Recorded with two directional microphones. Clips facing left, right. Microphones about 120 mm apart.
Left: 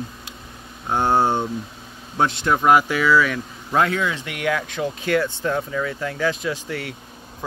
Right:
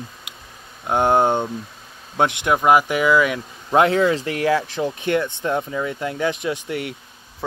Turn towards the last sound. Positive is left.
turn(degrees=-25)  # may be behind; listen again after turning